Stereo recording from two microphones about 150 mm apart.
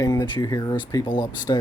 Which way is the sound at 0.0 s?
25° left (ahead or behind).